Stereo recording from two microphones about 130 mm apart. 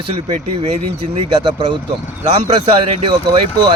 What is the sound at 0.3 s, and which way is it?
Speech, 50° right (ahead or behind).